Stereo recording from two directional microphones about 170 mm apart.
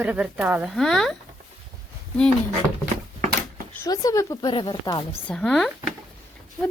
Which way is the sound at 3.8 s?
20° left (ahead or behind).